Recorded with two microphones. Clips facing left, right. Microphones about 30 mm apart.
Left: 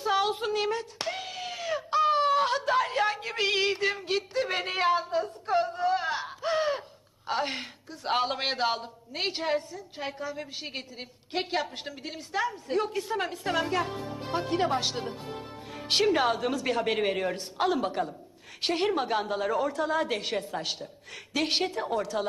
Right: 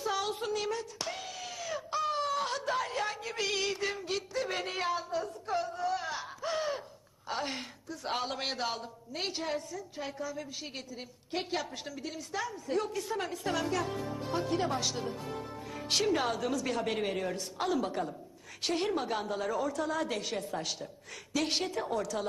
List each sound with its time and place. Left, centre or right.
0.0 s a sound: left
7.2 s a man's voice: left
20.4 s a woman's voice: left
21.3 s a woman's voice: left